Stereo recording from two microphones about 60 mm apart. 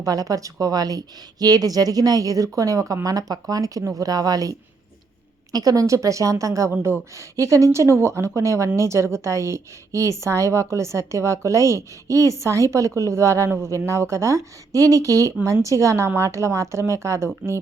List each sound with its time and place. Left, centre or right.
0.0 s a woman's voice: right